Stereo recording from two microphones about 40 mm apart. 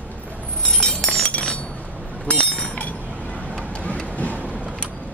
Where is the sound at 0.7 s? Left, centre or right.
Centre.